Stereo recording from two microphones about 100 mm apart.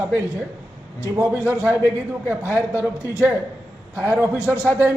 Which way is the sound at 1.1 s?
25° right (ahead or behind).